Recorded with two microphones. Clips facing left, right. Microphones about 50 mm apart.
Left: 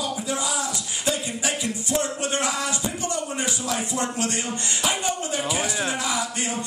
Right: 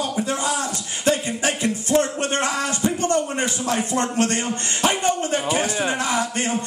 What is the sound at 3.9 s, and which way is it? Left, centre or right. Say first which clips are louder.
A man's voice: right 5 dB; right.